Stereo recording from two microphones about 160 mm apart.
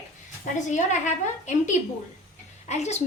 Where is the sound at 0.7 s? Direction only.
50° left (ahead or behind).